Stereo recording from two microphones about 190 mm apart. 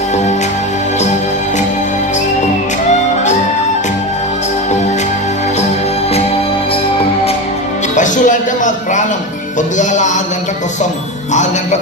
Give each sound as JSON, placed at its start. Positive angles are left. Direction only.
{"t": 7.9, "sound": "music", "side_deg": 40}